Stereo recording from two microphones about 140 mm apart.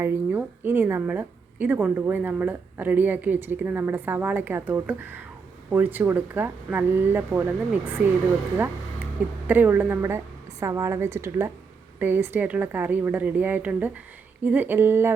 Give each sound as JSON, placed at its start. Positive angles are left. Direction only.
{"t": 0.0, "sound": "a woman's voice", "side_deg": -15}
{"t": 9.5, "sound": "a woman's voice", "side_deg": -15}